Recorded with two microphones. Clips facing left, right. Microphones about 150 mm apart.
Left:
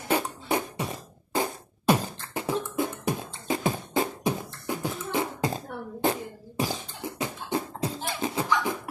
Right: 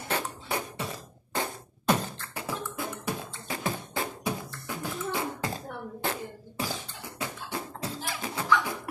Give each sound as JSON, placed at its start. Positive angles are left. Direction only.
{"t": 0.1, "sound": "music", "side_deg": 15}
{"t": 2.3, "sound": "beatboxing", "side_deg": 20}